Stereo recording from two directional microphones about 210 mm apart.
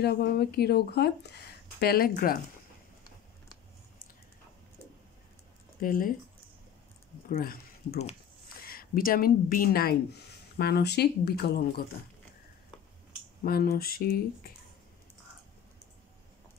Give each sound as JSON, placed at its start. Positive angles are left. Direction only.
{"t": 0.0, "sound": "speech", "side_deg": 50}
{"t": 5.8, "sound": "speech", "side_deg": 40}
{"t": 7.2, "sound": "speech", "side_deg": 45}
{"t": 13.4, "sound": "speech", "side_deg": 45}